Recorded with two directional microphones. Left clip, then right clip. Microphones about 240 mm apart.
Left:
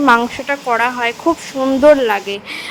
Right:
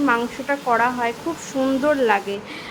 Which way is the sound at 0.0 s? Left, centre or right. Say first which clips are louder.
Left 8 dB; left.